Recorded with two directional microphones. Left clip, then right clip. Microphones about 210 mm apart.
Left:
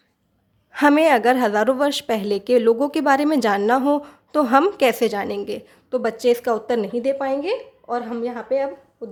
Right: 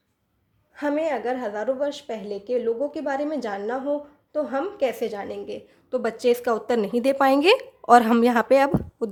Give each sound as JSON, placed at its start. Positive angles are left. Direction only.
{"t": 0.7, "sound": "a woman's voice", "side_deg": 30}
{"t": 6.0, "sound": "speech", "side_deg": 0}